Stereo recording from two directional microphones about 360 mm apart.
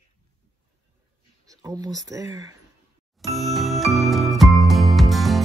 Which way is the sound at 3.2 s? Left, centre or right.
Centre.